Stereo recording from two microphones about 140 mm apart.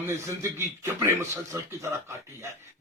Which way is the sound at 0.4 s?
20° right (ahead or behind).